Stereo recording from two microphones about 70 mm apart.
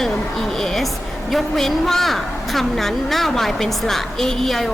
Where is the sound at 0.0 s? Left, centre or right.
Centre.